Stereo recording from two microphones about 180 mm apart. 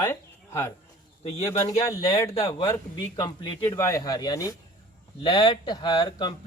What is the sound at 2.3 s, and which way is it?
Speech, 30° left (ahead or behind).